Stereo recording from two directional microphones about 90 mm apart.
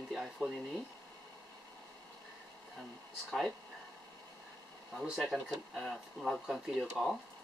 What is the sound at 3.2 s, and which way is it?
Speech, centre (ahead or behind).